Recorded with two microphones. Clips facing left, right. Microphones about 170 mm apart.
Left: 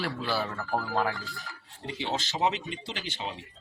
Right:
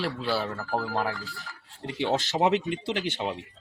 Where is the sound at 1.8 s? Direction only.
60° right (ahead or behind).